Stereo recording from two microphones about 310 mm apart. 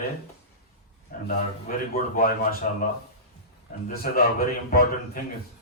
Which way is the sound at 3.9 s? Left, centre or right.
Left.